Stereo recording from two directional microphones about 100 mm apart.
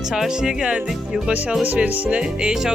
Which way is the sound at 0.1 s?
5° right (ahead or behind).